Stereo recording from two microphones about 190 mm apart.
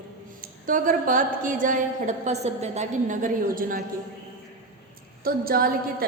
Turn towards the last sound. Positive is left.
turn(degrees=-50)  # may be behind; listen again after turning